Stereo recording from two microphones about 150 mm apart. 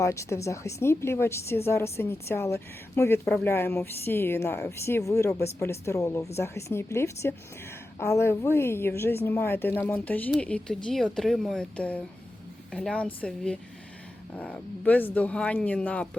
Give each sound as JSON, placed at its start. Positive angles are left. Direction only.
{"t": 0.0, "sound": "speech", "side_deg": 20}